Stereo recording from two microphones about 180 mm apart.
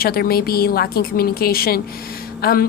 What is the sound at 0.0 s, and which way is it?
A woman's voice, 55° left (ahead or behind).